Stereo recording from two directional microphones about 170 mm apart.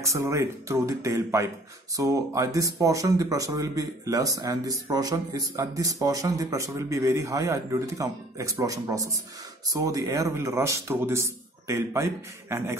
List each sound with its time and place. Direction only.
0.0 s a man's voice: 20° right (ahead or behind)